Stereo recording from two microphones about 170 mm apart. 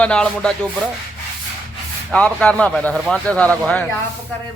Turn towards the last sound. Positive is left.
turn(degrees=10)  # may be behind; listen again after turning